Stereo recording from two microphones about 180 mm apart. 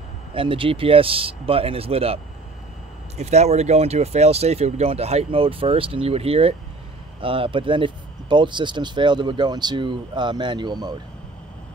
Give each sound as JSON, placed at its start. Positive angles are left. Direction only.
{"t": 0.3, "sound": "speech", "side_deg": -30}
{"t": 3.2, "sound": "speech", "side_deg": -40}